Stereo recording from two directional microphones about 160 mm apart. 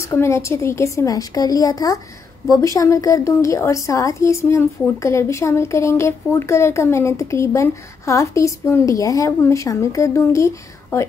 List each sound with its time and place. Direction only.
0.0 s a woman's voice: 15° left (ahead or behind)